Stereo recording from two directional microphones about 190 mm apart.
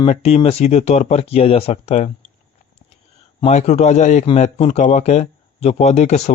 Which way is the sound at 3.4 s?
35° left (ahead or behind).